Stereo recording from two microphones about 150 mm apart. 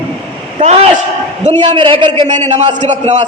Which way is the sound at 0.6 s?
50° right (ahead or behind).